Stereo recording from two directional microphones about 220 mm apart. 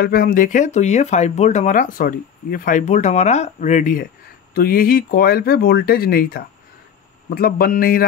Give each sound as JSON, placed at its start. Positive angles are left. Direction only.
{"t": 0.0, "sound": "speech", "side_deg": 40}